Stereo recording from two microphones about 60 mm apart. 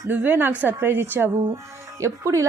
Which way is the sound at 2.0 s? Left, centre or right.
Right.